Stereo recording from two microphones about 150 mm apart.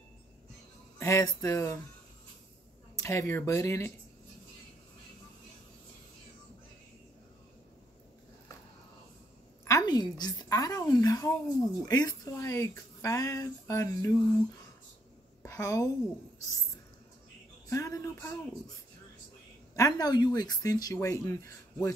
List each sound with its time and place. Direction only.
0.9 s a woman's voice: 20° left (ahead or behind)
3.0 s a woman's voice: 20° left (ahead or behind)
9.7 s a woman's voice: 25° left (ahead or behind)
15.4 s a woman's voice: 20° left (ahead or behind)
17.6 s a woman's voice: 20° left (ahead or behind)
19.7 s a woman's voice: 25° left (ahead or behind)